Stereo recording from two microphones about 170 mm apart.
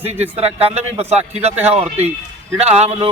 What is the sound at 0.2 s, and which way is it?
A man's voice, 40° right (ahead or behind).